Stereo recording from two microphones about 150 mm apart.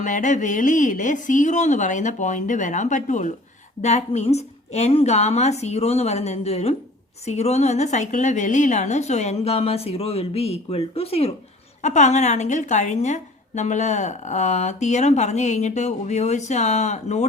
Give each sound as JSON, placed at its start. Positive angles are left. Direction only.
{"t": 0.0, "sound": "a woman's voice", "side_deg": 55}
{"t": 11.8, "sound": "a woman's voice", "side_deg": 50}